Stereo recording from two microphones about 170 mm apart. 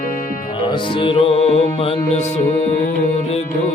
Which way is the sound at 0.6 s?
30° left (ahead or behind).